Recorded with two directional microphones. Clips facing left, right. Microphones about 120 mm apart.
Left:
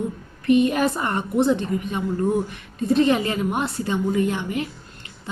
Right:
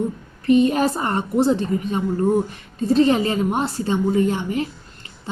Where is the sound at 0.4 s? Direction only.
35° right (ahead or behind).